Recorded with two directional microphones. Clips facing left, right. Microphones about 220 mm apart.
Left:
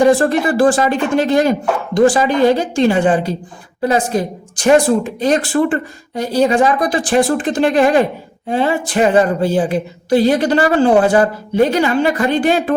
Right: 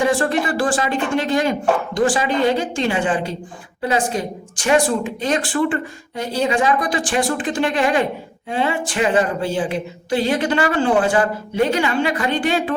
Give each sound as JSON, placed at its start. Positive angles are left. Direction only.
{"t": 0.0, "sound": "speech", "side_deg": 40}